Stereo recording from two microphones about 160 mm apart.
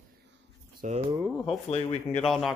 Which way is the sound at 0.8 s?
50° right (ahead or behind).